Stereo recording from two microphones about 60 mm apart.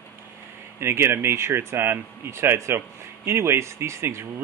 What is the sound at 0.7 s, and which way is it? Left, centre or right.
Speech, right.